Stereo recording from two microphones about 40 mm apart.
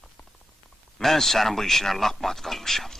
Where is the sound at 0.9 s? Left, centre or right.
Centre.